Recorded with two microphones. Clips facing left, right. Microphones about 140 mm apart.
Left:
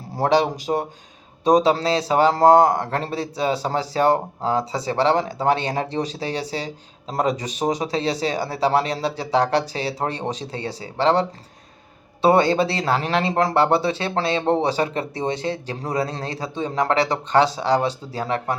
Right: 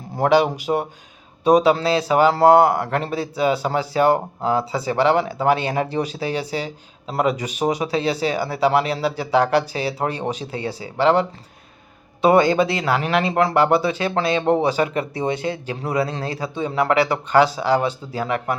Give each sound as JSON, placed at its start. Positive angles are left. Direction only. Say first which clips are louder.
{"t": 0.2, "sound": "speech", "louder": "right 2 dB", "side_deg": 35}